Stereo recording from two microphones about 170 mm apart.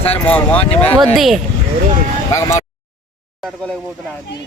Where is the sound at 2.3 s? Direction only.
15° left (ahead or behind).